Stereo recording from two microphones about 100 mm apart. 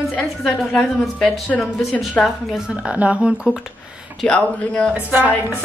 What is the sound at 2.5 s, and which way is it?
Speech, 10° right (ahead or behind).